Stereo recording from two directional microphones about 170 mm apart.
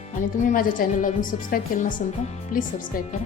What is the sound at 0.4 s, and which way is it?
A woman's voice, 50° left (ahead or behind).